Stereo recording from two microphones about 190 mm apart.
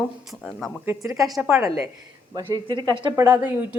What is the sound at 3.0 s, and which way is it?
Speech, 20° right (ahead or behind).